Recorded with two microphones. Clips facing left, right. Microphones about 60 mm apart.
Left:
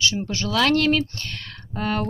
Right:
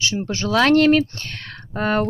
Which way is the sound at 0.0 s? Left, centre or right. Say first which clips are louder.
Right 1 dB; right.